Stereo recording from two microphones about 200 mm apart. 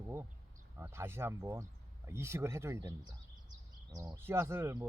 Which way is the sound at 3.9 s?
15° right (ahead or behind).